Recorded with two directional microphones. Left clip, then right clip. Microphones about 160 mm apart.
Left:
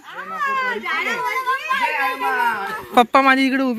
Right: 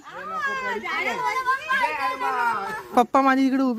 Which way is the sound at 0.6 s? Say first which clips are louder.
Left 5 dB; 20° right (ahead or behind).